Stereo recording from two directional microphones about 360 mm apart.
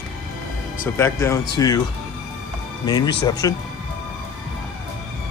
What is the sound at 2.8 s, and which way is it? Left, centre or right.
Speech, centre.